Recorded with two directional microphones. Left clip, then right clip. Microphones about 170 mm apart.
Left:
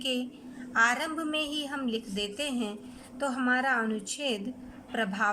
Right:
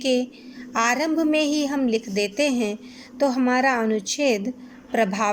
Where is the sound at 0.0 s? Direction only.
25° right (ahead or behind).